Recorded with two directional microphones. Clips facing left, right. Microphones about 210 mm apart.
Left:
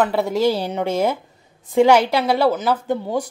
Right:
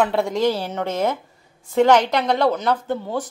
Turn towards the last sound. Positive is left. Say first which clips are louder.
# left 3 dB
turn(degrees=15)  # may be behind; listen again after turning